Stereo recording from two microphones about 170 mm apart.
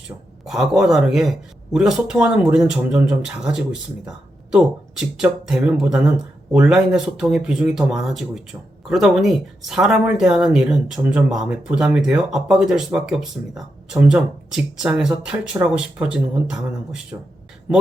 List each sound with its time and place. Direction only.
0.4 s speech: centre (ahead or behind)